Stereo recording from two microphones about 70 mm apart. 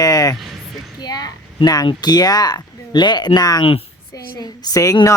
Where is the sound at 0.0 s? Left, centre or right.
Left.